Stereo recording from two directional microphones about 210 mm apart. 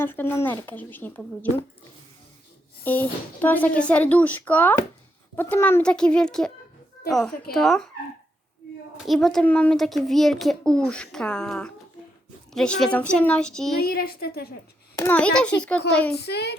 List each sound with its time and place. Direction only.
0.0 s speech: 10° left (ahead or behind)
2.8 s a child's voice: 10° left (ahead or behind)
9.0 s a child's voice: centre (ahead or behind)
13.8 s a woman's voice: 45° left (ahead or behind)
15.0 s a child's voice: 5° left (ahead or behind)
16.1 s a woman's voice: 50° left (ahead or behind)